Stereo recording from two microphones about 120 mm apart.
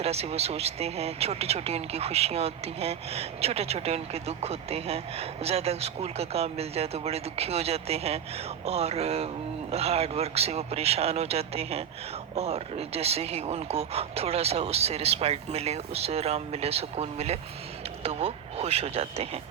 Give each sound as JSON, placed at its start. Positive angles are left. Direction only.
{"t": 0.0, "sound": "speech", "side_deg": -60}